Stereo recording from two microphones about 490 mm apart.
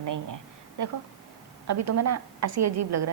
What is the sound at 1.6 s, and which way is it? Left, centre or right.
A woman's voice, right.